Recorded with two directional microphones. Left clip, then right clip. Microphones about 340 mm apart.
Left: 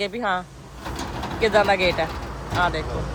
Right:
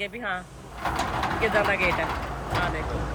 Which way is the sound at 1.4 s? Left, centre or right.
Centre.